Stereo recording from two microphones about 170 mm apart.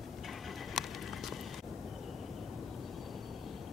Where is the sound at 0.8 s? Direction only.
Centre (ahead or behind).